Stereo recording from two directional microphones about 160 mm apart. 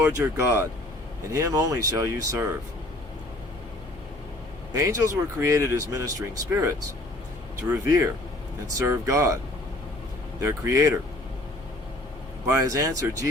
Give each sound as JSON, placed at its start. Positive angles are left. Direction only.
{"t": 0.0, "sound": "speech", "side_deg": -15}
{"t": 4.7, "sound": "speech", "side_deg": -20}
{"t": 10.4, "sound": "speech", "side_deg": -20}
{"t": 12.5, "sound": "speech", "side_deg": -20}